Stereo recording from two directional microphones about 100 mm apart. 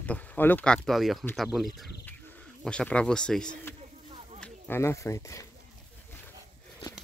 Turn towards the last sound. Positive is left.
turn(degrees=30)  # may be behind; listen again after turning